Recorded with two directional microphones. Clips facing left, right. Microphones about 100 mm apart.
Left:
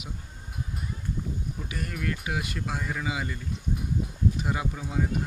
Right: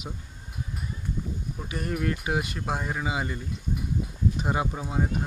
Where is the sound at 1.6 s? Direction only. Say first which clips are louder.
Right 5 dB; 30° right (ahead or behind).